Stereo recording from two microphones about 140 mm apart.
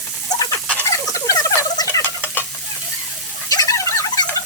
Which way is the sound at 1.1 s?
25° left (ahead or behind).